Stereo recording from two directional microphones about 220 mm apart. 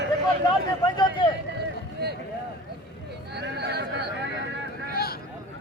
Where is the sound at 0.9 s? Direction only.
20° left (ahead or behind).